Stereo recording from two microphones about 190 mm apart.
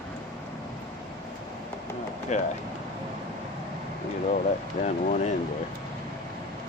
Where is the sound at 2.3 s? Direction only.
40° left (ahead or behind).